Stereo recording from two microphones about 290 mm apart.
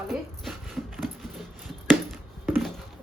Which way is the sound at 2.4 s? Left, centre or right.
Centre.